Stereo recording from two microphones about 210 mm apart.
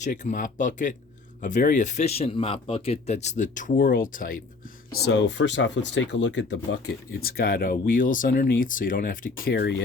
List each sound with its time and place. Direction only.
0.0 s speech: 35° left (ahead or behind)
5.0 s speech: 55° left (ahead or behind)